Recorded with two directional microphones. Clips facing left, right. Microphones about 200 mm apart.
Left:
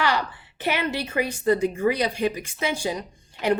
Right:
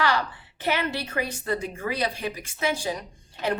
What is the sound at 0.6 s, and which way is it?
A woman's voice, 15° left (ahead or behind).